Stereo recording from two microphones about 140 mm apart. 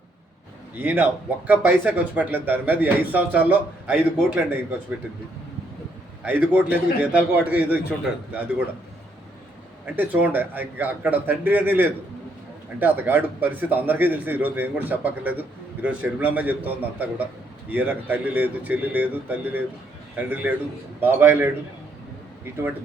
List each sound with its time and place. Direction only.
0.8 s speech: 15° right (ahead or behind)
6.2 s speech: 10° right (ahead or behind)
9.8 s speech: 10° right (ahead or behind)